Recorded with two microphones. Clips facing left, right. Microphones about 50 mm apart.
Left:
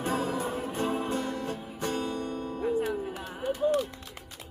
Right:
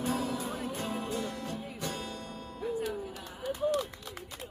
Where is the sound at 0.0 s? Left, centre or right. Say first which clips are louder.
Left 3 dB; left.